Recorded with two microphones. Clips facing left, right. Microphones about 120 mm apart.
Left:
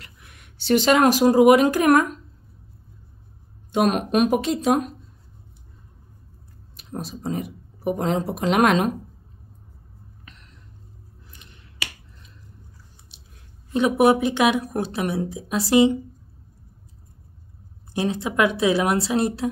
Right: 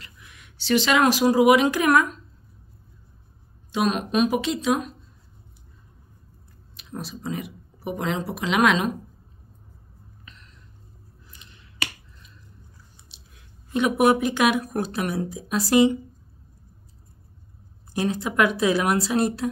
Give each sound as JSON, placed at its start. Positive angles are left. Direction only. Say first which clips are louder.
{"t": 0.0, "sound": "speech", "louder": "even", "side_deg": 55}
{"t": 3.7, "sound": "speech", "louder": "left 3 dB", "side_deg": 55}
{"t": 6.8, "sound": "speech", "louder": "left 3 dB", "side_deg": 45}
{"t": 13.1, "sound": "chewing", "louder": "left 1 dB", "side_deg": 55}
{"t": 13.7, "sound": "a woman's voice", "louder": "left 2 dB", "side_deg": 30}
{"t": 17.9, "sound": "a woman's voice", "louder": "even", "side_deg": 25}